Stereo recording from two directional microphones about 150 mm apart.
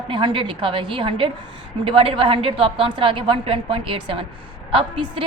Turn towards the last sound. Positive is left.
turn(degrees=-35)  # may be behind; listen again after turning